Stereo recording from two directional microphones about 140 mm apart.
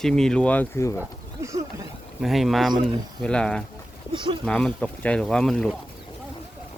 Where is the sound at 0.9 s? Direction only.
20° right (ahead or behind).